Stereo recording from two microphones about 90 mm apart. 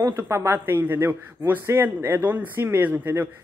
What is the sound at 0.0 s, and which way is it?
Speech, 30° right (ahead or behind).